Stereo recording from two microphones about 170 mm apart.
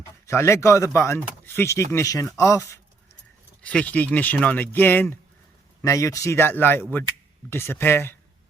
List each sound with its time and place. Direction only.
0.3 s speech: 15° left (ahead or behind)
3.6 s speech: 5° left (ahead or behind)